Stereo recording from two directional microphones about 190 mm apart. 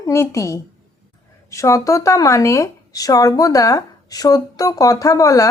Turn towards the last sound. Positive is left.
turn(degrees=15)  # may be behind; listen again after turning